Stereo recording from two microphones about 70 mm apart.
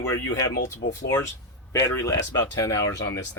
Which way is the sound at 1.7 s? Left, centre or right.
Left.